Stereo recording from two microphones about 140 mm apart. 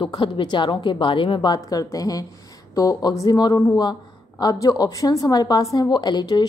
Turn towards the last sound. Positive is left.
turn(degrees=30)  # may be behind; listen again after turning